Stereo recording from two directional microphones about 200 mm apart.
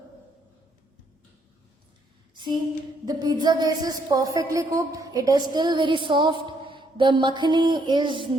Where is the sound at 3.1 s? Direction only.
20° right (ahead or behind).